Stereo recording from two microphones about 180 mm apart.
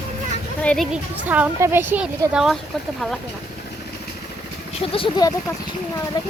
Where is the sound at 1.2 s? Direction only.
10° right (ahead or behind).